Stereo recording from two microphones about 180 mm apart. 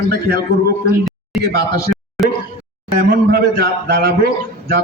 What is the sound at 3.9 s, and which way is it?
Speech, 55° right (ahead or behind).